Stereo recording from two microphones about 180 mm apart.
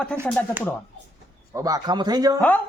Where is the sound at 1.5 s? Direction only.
20° right (ahead or behind).